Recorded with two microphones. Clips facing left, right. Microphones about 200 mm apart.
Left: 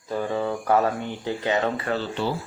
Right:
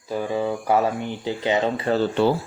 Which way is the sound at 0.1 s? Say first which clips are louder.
Right 2 dB; 10° right (ahead or behind).